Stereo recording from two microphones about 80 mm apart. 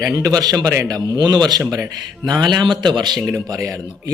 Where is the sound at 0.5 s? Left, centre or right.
Right.